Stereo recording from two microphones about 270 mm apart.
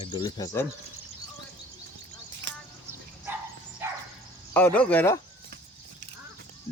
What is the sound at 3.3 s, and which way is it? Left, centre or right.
Dog, centre.